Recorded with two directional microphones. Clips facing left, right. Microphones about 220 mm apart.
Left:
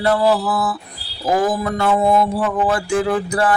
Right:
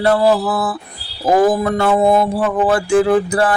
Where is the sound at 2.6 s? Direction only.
30° right (ahead or behind).